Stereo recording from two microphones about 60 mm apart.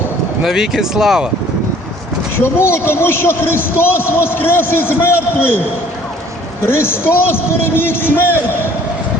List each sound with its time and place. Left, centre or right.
0.4 s speech: centre
2.4 s a man's voice: left